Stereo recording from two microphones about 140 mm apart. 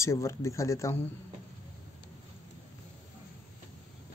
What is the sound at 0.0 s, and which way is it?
Speech, 20° left (ahead or behind).